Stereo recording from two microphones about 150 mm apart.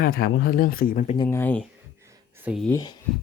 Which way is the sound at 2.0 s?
15° right (ahead or behind).